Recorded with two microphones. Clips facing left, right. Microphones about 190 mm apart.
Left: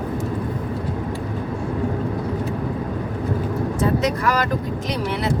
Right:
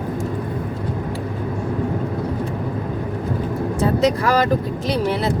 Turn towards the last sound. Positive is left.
turn(degrees=-30)  # may be behind; listen again after turning